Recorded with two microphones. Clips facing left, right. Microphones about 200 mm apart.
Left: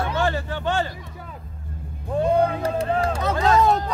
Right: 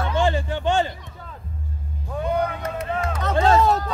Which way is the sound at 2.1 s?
30° left (ahead or behind).